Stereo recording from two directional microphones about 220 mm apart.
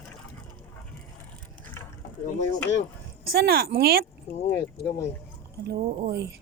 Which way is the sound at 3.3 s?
45° right (ahead or behind).